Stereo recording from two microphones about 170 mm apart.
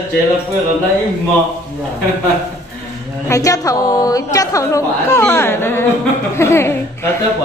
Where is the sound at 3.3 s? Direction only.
20° left (ahead or behind).